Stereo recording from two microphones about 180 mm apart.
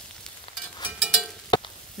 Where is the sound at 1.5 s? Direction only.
25° left (ahead or behind).